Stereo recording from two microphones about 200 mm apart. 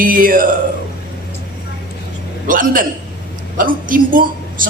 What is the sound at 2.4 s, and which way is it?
A woman's voice, 45° right (ahead or behind).